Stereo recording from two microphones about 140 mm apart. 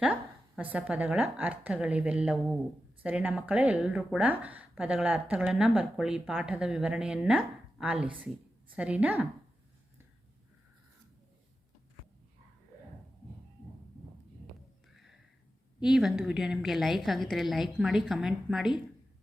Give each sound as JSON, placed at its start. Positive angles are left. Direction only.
{"t": 0.0, "sound": "a woman's voice", "side_deg": -10}
{"t": 15.8, "sound": "a woman's voice", "side_deg": 0}